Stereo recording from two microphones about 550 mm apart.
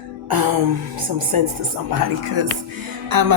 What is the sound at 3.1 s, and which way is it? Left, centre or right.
Speech, right.